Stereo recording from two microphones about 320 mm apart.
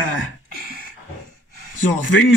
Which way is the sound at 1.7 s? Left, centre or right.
Left.